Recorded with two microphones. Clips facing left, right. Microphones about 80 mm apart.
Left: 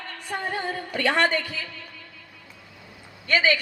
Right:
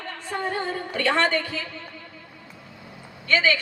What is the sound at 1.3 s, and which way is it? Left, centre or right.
Speech, right.